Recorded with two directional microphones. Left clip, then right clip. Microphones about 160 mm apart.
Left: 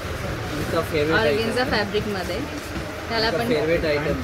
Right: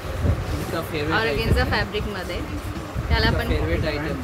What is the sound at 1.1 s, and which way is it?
Speech, 40° left (ahead or behind).